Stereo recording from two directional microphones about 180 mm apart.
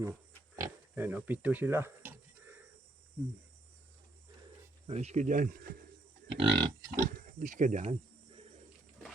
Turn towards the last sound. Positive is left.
turn(degrees=-40)  # may be behind; listen again after turning